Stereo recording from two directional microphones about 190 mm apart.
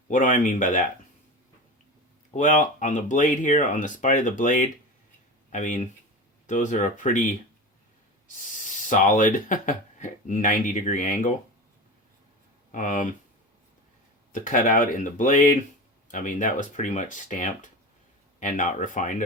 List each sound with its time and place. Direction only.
0.1 s speech: 45° left (ahead or behind)
2.3 s speech: 40° left (ahead or behind)
8.5 s speech: 40° left (ahead or behind)
12.7 s speech: 45° left (ahead or behind)
14.3 s speech: 45° left (ahead or behind)